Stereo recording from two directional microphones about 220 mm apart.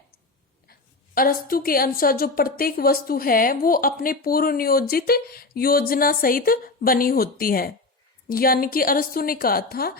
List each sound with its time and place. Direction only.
0.7 s a woman's voice: 40° left (ahead or behind)